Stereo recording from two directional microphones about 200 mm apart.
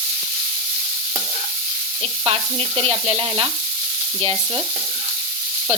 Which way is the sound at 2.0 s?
30° right (ahead or behind).